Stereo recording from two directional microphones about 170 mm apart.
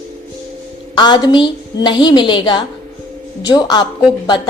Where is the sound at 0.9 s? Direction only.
25° left (ahead or behind).